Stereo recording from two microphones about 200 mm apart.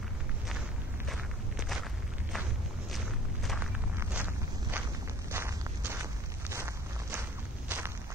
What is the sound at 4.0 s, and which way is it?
Walk, 10° right (ahead or behind).